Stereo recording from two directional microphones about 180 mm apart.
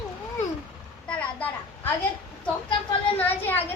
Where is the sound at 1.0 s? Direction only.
5° left (ahead or behind).